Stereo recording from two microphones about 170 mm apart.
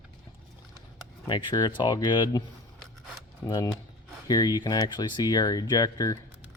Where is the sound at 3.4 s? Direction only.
20° left (ahead or behind).